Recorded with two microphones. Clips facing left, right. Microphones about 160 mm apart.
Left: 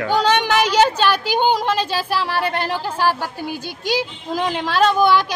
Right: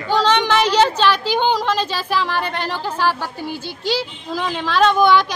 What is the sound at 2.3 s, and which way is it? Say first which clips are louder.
Speech: left 2 dB; 45° left (ahead or behind).